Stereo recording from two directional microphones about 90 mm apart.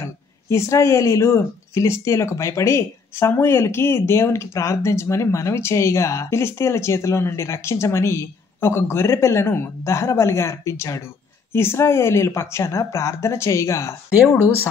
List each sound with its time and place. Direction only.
0.0 s speech: 30° left (ahead or behind)